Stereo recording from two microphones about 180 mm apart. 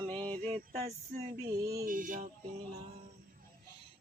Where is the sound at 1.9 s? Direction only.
50° right (ahead or behind).